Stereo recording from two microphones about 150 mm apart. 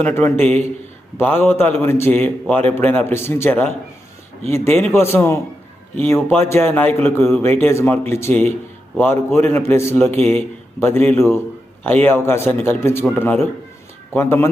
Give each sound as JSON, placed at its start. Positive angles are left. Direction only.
{"t": 0.0, "sound": "speech", "side_deg": 15}